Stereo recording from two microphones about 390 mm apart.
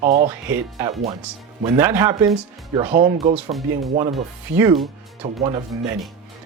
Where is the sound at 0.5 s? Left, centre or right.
Centre.